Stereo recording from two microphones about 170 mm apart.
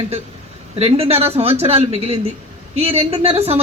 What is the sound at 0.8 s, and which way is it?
A man's voice, 35° right (ahead or behind).